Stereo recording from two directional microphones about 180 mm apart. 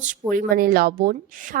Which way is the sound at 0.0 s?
45° right (ahead or behind).